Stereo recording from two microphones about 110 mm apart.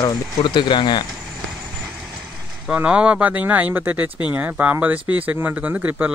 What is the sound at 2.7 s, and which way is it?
Speech, 10° right (ahead or behind).